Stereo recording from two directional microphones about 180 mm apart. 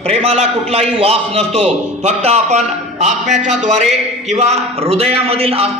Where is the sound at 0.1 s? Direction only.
35° right (ahead or behind).